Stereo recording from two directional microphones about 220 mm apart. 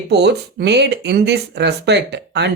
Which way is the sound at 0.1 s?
50° right (ahead or behind).